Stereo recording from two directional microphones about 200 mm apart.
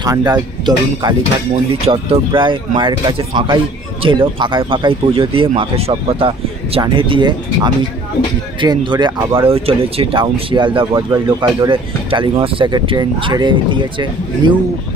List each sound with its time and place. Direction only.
0.0 s speech: 20° right (ahead or behind)